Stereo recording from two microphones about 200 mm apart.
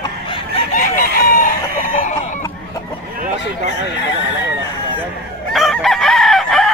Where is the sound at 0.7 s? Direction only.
45° left (ahead or behind).